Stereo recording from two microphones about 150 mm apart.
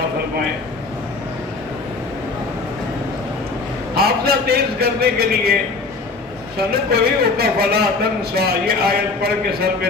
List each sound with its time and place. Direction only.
3.9 s a man's voice: 90° right
6.6 s a man's voice: 90° right